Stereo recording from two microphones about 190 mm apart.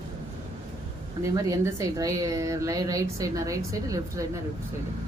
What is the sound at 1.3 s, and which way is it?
A woman's voice, 20° right (ahead or behind).